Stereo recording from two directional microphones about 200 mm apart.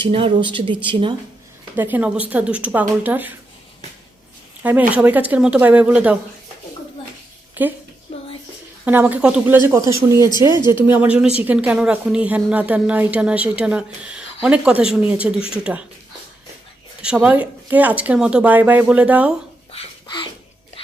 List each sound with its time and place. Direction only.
0.0 s speech: 30° right (ahead or behind)
1.7 s speech: 10° right (ahead or behind)
4.6 s speech: 10° right (ahead or behind)
7.6 s speech: 10° right (ahead or behind)
8.1 s a sound: 30° left (ahead or behind)
8.8 s speech: 10° right (ahead or behind)
10.5 s speech: 20° left (ahead or behind)
10.8 s speech: 10° right (ahead or behind)
17.0 s speech: 5° right (ahead or behind)
19.7 s dog: 25° left (ahead or behind)